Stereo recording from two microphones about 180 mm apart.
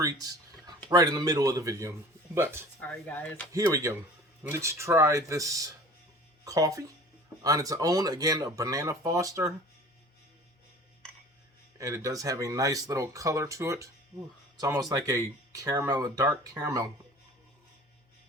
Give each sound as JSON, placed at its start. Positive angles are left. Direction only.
{"t": 0.0, "sound": "speech", "side_deg": -20}
{"t": 2.8, "sound": "speech", "side_deg": 10}
{"t": 3.5, "sound": "speech", "side_deg": -20}
{"t": 11.8, "sound": "speech", "side_deg": -20}